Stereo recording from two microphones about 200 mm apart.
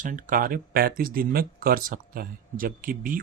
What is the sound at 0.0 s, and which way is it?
Speech, 40° right (ahead or behind).